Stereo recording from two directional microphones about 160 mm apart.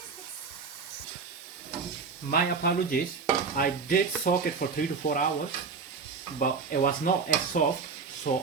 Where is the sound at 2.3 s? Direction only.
80° left.